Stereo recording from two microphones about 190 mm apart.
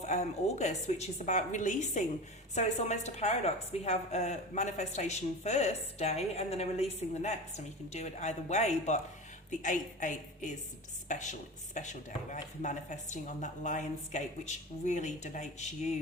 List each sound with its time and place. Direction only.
0.0 s a woman's voice: 35° left (ahead or behind)